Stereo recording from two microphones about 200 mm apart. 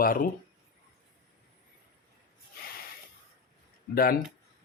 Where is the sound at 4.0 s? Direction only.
50° left (ahead or behind).